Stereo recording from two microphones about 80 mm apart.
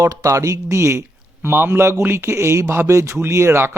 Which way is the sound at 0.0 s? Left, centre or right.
Right.